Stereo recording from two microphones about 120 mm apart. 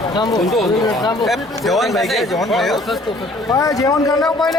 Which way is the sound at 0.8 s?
35° left (ahead or behind).